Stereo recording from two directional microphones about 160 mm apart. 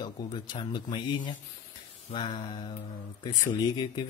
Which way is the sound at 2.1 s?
30° left (ahead or behind).